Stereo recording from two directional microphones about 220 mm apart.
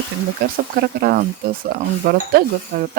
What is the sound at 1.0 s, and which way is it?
Speech, 45° right (ahead or behind).